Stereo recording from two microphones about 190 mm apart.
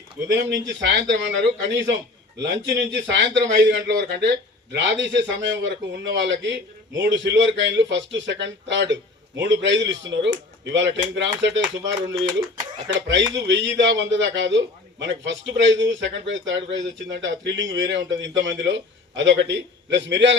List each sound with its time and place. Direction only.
0.3 s a man's voice: 70° right (ahead or behind)